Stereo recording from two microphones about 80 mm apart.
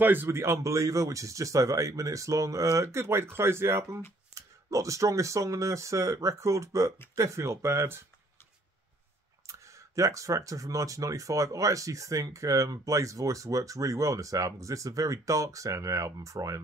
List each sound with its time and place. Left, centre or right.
0.0 s speech: right
9.5 s speech: right